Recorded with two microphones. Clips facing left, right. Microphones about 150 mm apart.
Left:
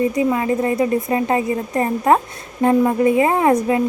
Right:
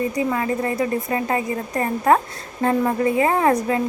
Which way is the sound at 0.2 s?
20° left (ahead or behind).